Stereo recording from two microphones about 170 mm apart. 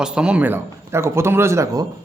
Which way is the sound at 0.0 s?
5° right (ahead or behind).